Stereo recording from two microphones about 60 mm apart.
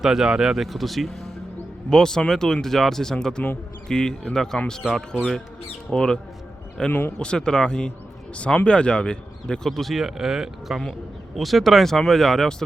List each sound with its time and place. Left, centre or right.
0.0 s speech: centre
4.8 s speech: centre
5.9 s speech: centre